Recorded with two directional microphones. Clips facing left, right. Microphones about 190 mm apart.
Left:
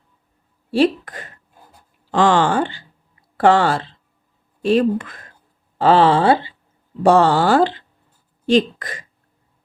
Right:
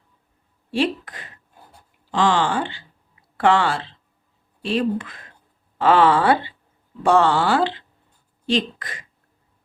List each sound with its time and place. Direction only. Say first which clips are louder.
0.7 s speech: left 6 dB; 40° left (ahead or behind)
5.8 s speech: left 3 dB; 30° left (ahead or behind)
7.0 s speech: left 4 dB; 40° left (ahead or behind)